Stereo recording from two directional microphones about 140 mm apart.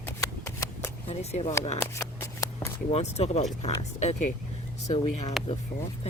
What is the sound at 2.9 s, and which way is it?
Speech, 50° left (ahead or behind).